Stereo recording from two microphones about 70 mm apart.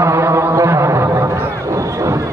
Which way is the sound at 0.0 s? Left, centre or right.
Right.